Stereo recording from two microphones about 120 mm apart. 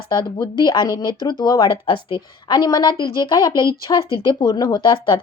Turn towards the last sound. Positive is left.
turn(degrees=40)  # may be behind; listen again after turning